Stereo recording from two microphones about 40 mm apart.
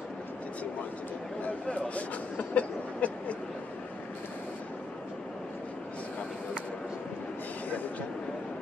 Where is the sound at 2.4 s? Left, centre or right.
Left.